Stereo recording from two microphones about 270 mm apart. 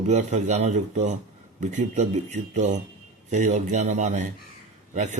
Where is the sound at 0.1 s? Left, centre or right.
Right.